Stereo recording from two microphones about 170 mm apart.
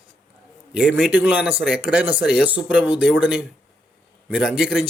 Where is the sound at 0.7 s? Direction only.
5° right (ahead or behind).